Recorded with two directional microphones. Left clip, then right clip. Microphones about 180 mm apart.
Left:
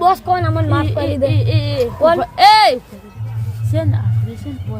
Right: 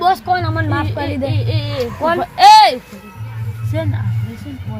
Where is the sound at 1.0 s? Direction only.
20° left (ahead or behind).